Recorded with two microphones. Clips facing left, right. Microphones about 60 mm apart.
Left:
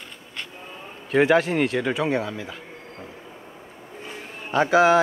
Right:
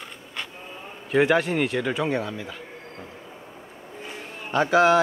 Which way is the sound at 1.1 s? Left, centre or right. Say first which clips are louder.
Left 2 dB; centre.